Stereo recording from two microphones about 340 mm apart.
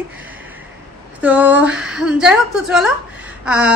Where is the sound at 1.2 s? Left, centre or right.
Centre.